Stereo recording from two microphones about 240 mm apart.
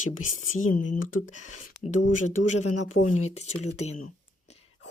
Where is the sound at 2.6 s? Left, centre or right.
Left.